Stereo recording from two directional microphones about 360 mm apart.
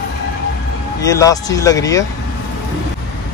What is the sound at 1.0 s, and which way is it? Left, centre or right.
Speech, centre.